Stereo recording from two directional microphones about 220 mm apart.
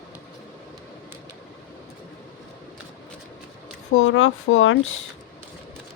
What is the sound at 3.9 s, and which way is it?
Speech, 65° left (ahead or behind).